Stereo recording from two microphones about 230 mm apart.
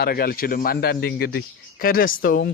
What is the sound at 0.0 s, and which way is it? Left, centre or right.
A man's voice, left.